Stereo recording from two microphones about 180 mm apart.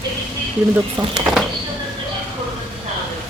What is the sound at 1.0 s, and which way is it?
Speech, 10° right (ahead or behind).